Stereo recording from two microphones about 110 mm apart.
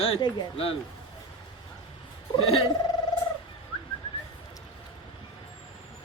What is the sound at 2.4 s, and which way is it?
Speech, 55° left (ahead or behind).